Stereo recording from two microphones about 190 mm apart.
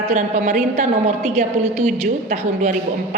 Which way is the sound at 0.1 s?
40° right (ahead or behind).